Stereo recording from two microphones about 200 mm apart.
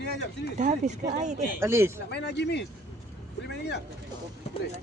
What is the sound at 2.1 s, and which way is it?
Speech, 55° left (ahead or behind).